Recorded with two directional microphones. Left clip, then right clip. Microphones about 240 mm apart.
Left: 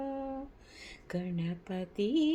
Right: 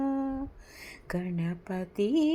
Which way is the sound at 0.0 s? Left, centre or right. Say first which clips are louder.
Right 6 dB; centre.